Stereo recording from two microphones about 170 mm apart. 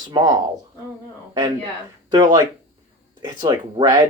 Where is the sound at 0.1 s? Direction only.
20° right (ahead or behind).